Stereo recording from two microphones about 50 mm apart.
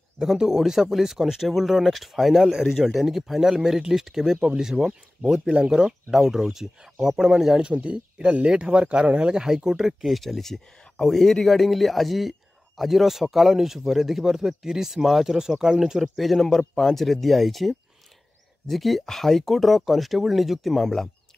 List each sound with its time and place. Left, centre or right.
0.2 s speech: centre
7.6 s speech: right; by 21.1 s centre